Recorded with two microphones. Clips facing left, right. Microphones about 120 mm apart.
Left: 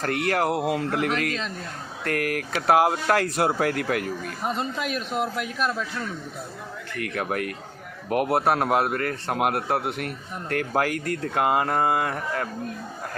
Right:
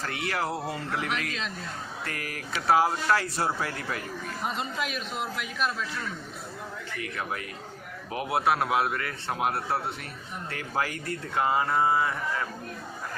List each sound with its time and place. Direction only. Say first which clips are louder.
0.0 s speech: left 7 dB; 55° left (ahead or behind); by 0.9 s 70° left (ahead or behind)
0.9 s a man's voice: left 6 dB; 50° left (ahead or behind)
2.0 s speech: left 15 dB; 60° left (ahead or behind)
4.5 s a man's voice: left 4 dB; 45° left (ahead or behind)
6.9 s speech: left 7 dB; 60° left (ahead or behind)
8.3 s a man's voice: left 2 dB; 45° left (ahead or behind)